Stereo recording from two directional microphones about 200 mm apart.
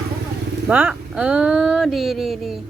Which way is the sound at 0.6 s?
10° right (ahead or behind).